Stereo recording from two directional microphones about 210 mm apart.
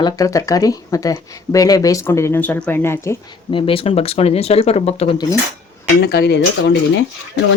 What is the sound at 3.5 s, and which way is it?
Speech, 25° left (ahead or behind).